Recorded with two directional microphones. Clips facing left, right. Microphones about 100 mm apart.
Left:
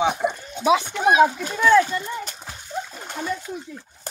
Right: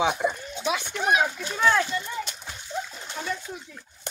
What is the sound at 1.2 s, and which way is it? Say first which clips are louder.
A child's voice: left 6 dB; 45° left (ahead or behind).